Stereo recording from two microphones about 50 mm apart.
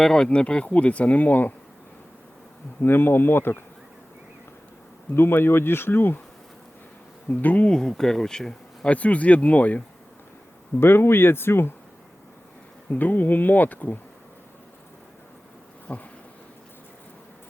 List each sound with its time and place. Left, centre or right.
0.0 s speech: centre; by 1.5 s left
2.8 s speech: left
5.1 s speech: left
7.3 s speech: left
7.7 s speech: centre
8.9 s speech: left
10.8 s speech: left
12.9 s speech: left
15.9 s speech: left